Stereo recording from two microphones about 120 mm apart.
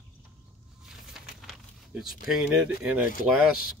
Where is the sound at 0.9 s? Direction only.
5° right (ahead or behind).